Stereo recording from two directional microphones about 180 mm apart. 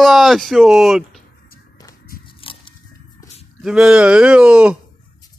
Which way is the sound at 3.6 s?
5° right (ahead or behind).